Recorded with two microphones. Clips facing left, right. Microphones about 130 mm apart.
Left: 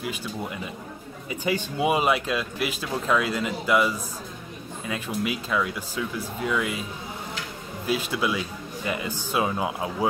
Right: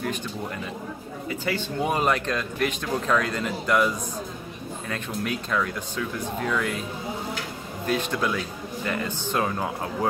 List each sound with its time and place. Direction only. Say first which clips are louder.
1.3 s speech: left 2 dB; 15° left (ahead or behind)
7.8 s speech: even; 5° left (ahead or behind)